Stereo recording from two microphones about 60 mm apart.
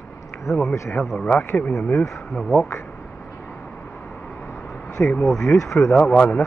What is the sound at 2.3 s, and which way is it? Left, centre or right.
Speech, centre.